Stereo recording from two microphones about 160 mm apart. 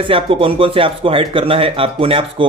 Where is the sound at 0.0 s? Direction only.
35° right (ahead or behind).